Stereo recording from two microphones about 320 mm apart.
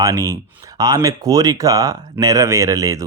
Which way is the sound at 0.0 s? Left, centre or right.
Centre.